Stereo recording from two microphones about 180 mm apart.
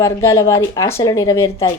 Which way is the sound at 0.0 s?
15° left (ahead or behind).